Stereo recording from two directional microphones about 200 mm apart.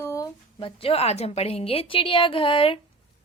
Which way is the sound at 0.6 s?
30° left (ahead or behind).